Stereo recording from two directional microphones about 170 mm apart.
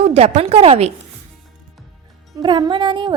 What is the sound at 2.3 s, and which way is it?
Music, 25° right (ahead or behind).